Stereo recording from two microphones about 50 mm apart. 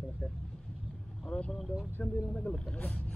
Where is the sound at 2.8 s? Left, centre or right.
Left.